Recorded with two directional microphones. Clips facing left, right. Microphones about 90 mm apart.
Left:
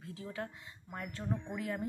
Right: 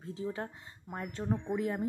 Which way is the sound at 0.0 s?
30° right (ahead or behind).